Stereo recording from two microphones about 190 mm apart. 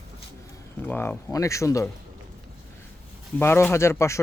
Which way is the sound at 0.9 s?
10° left (ahead or behind).